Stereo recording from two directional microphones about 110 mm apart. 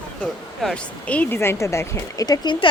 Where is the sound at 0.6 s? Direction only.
10° left (ahead or behind); by 2.3 s 25° left (ahead or behind).